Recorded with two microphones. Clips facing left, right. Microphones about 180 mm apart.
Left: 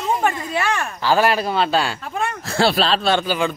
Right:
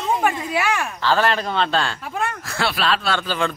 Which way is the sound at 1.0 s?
10° left (ahead or behind).